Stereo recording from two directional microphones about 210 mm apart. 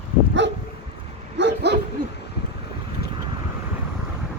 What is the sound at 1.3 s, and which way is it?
Bow-wow, 55° right (ahead or behind).